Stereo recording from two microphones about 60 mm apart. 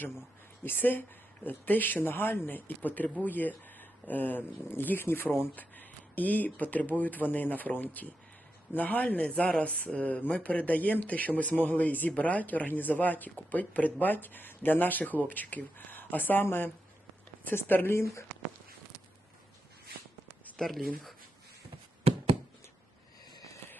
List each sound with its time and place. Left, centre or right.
0.6 s speech: left
5.5 s speech: left
20.6 s speech: centre